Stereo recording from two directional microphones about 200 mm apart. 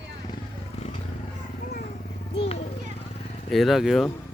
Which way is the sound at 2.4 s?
30° left (ahead or behind).